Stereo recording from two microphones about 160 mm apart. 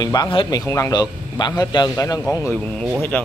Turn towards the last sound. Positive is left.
turn(degrees=10)  # may be behind; listen again after turning